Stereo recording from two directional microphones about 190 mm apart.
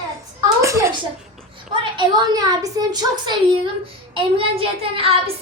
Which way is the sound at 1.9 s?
20° right (ahead or behind).